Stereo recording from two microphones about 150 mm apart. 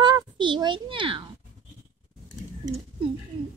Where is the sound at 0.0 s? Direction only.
30° right (ahead or behind).